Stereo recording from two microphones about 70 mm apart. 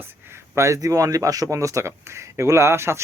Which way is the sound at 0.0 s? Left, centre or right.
Right.